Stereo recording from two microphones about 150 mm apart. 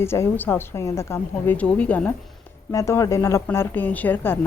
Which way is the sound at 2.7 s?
20° left (ahead or behind).